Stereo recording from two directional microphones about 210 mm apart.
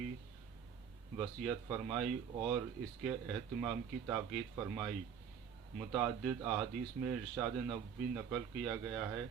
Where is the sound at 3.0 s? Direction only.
Centre (ahead or behind).